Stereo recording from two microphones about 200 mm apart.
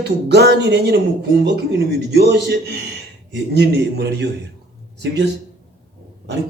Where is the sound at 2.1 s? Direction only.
55° right (ahead or behind).